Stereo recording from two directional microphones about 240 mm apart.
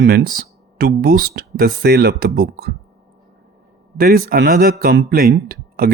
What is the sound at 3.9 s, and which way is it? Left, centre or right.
A man's voice, right.